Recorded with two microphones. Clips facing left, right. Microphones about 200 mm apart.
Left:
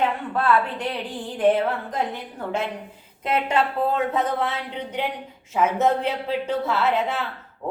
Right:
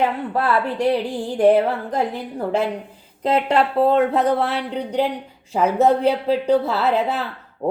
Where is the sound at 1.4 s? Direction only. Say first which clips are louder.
Right 4 dB; 40° right (ahead or behind).